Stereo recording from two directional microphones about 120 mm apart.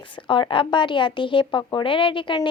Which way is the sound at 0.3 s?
45° left (ahead or behind).